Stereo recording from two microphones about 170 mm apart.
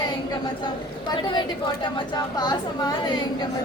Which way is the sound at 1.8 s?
25° left (ahead or behind).